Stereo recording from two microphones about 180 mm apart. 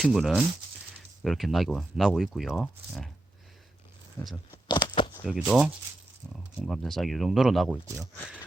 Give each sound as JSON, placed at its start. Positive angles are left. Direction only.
{"t": 0.0, "sound": "speech", "side_deg": 0}
{"t": 4.2, "sound": "speech", "side_deg": 15}
{"t": 5.2, "sound": "speech", "side_deg": -5}